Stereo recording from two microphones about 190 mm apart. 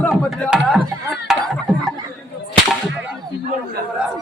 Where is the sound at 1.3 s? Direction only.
5° right (ahead or behind).